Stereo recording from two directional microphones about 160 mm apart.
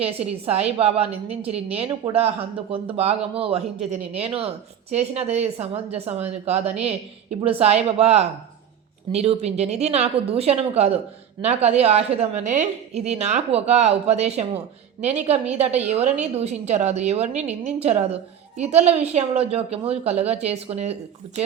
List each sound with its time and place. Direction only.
0.0 s a woman's voice: 40° right (ahead or behind)